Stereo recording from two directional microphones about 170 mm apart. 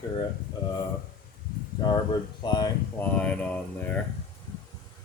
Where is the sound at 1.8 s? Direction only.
25° left (ahead or behind).